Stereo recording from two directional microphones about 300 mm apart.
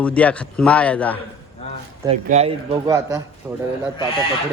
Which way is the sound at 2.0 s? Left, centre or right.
Centre.